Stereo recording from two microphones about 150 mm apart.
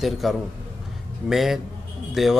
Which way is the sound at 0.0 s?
Centre (ahead or behind).